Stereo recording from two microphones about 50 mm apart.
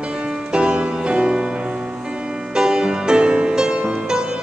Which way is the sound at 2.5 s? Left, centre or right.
Centre.